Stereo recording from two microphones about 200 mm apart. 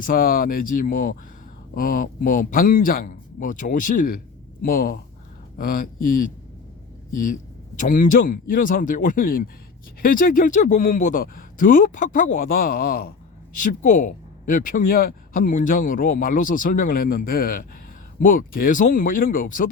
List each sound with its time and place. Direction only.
0.0 s speech: 45° left (ahead or behind)
7.8 s speech: 40° left (ahead or behind)